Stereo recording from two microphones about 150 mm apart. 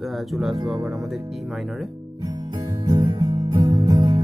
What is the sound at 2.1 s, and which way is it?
Music, 25° right (ahead or behind).